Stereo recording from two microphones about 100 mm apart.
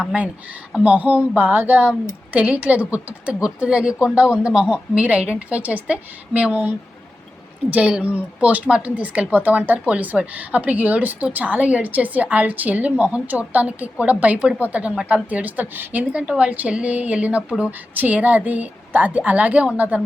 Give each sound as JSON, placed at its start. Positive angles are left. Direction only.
{"t": 0.7, "sound": "speech", "side_deg": -10}